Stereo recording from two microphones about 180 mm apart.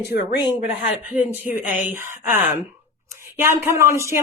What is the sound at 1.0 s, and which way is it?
Speech, 5° right (ahead or behind).